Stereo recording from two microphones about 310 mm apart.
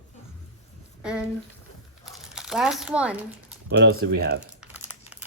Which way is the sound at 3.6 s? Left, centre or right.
Right.